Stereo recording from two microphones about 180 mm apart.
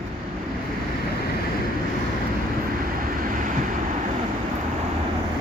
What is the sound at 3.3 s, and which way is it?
Vehicle, 45° right (ahead or behind).